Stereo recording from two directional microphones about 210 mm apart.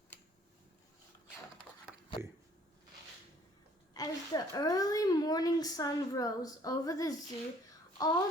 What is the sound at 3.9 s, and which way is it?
A woman's voice, 15° left (ahead or behind).